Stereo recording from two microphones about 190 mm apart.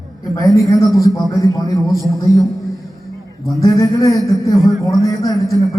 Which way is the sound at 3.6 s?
15° left (ahead or behind).